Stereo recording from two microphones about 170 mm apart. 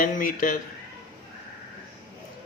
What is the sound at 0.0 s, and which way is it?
Speech, 55° left (ahead or behind).